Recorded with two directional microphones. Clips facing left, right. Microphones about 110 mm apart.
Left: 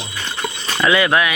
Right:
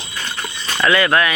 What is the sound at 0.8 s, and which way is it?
Speech, 15° left (ahead or behind).